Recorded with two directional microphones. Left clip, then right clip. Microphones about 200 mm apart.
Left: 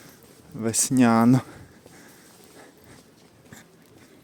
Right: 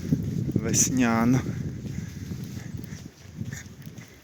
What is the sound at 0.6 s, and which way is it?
Speech, 25° left (ahead or behind).